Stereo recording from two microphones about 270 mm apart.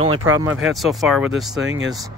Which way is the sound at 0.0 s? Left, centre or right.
Centre.